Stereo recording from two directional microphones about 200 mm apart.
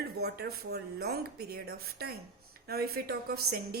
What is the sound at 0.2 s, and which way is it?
A woman's voice, 50° right (ahead or behind).